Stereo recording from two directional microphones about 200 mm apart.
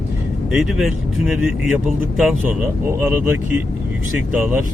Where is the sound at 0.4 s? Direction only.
Centre (ahead or behind).